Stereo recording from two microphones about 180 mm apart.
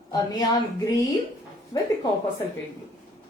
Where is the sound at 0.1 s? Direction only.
25° left (ahead or behind).